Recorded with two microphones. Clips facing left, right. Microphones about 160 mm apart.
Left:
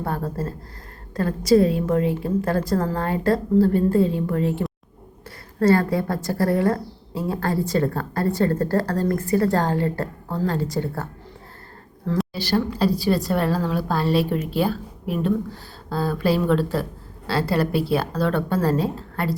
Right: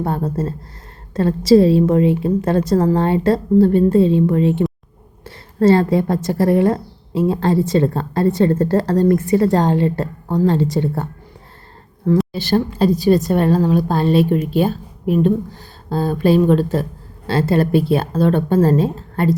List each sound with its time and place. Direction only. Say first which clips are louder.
0.0 s a woman's voice: right 6 dB; 20° right (ahead or behind)
12.3 s a woman's voice: right 5 dB; 25° right (ahead or behind)